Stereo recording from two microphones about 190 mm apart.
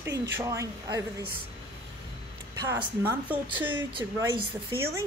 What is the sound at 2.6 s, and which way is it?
Speech, 10° right (ahead or behind).